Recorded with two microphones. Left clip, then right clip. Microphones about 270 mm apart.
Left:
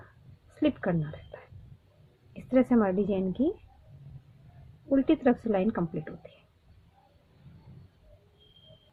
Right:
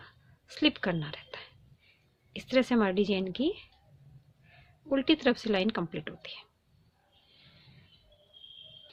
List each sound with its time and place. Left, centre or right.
0.6 s a woman's voice: right
2.3 s a woman's voice: right
4.9 s a woman's voice: right